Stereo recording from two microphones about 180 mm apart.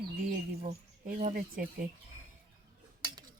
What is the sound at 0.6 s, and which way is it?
Speech, 45° right (ahead or behind).